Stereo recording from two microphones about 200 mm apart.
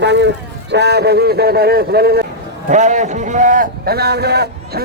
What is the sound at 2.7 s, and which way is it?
A man's voice, 35° right (ahead or behind).